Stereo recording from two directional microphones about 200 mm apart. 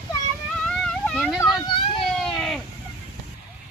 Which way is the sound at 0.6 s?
5° left (ahead or behind).